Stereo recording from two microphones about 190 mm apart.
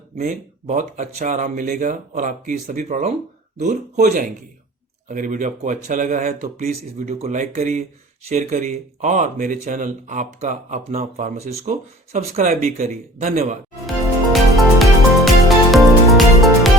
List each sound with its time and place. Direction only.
0.2 s speech: 40° right (ahead or behind)
14.8 s music: centre (ahead or behind)